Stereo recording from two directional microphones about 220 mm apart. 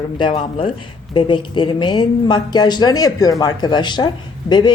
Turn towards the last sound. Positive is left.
turn(degrees=20)  # may be behind; listen again after turning